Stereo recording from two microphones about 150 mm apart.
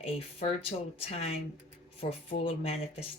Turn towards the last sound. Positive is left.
turn(degrees=40)  # may be behind; listen again after turning